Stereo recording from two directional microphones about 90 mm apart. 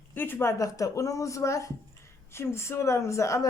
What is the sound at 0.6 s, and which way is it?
Speech, 35° left (ahead or behind).